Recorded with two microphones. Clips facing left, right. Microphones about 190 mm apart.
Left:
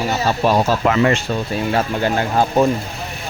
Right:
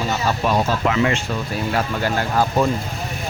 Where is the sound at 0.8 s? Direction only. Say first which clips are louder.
Left 4 dB; 45° left (ahead or behind).